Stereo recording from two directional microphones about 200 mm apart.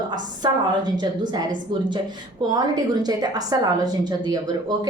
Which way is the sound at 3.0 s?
20° right (ahead or behind).